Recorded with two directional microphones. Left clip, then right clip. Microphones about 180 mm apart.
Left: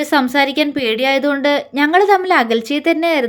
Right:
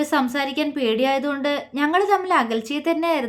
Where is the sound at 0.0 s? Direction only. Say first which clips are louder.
Left 7 dB; 25° left (ahead or behind).